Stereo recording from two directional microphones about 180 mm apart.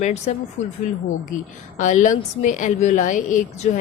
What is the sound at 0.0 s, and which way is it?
Speech, 40° left (ahead or behind).